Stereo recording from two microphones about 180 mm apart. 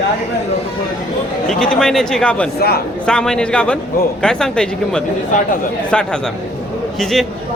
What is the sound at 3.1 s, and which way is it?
Speech, 5° left (ahead or behind).